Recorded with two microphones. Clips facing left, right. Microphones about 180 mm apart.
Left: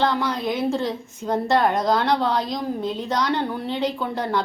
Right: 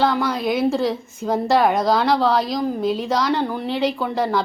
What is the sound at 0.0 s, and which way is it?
A woman's voice, 5° right (ahead or behind).